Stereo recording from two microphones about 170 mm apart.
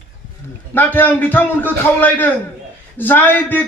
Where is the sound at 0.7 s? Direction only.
10° left (ahead or behind).